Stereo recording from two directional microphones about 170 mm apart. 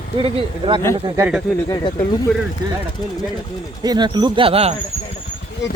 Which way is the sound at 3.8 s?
25° right (ahead or behind).